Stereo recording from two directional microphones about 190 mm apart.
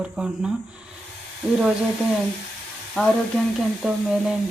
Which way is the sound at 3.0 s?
5° left (ahead or behind).